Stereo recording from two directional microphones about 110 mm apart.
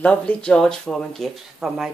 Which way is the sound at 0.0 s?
10° left (ahead or behind).